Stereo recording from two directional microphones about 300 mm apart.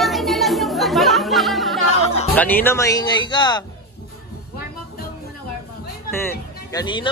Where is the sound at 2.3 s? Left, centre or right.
Centre.